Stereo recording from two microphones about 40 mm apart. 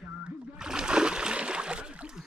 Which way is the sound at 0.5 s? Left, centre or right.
Centre.